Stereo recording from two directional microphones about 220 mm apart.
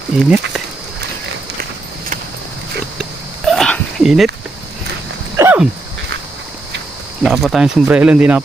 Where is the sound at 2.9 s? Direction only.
Centre (ahead or behind).